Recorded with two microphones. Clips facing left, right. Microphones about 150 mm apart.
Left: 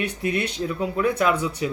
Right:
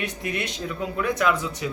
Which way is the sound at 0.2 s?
30° left (ahead or behind).